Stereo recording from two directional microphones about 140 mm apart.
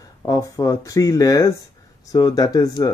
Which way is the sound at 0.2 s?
25° left (ahead or behind).